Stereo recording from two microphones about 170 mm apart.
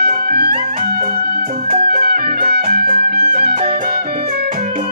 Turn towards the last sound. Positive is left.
turn(degrees=-60)  # may be behind; listen again after turning